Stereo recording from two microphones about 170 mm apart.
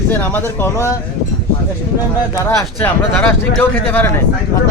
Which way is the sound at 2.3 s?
20° left (ahead or behind).